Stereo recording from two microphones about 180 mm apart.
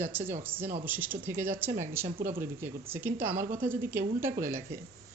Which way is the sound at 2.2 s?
55° right (ahead or behind).